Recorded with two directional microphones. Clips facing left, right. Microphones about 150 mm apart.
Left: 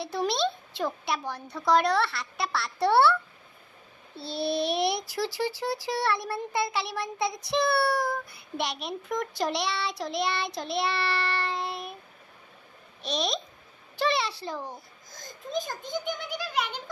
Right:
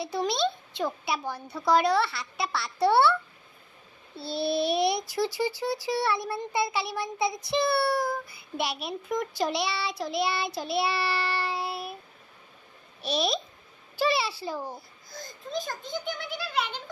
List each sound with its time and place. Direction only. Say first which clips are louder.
0.0 s a child's voice: even; centre (ahead or behind)
4.2 s a child's voice: right 1 dB; centre (ahead or behind)
13.0 s a child's voice: right 2 dB; 5° right (ahead or behind)
15.5 s a child's voice: left 1 dB; 20° left (ahead or behind)